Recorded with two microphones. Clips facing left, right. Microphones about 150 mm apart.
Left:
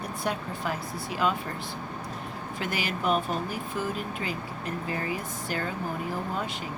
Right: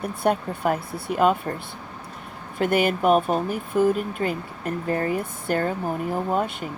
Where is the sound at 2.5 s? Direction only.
55° right (ahead or behind).